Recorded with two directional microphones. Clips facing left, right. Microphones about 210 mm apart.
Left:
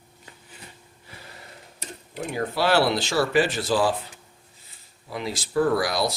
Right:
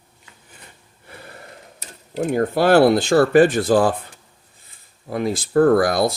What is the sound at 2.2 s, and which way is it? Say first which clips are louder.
Speech: right 7 dB; 45° right (ahead or behind).